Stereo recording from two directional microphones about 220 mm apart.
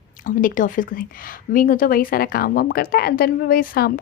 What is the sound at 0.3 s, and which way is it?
A woman's voice, 35° left (ahead or behind).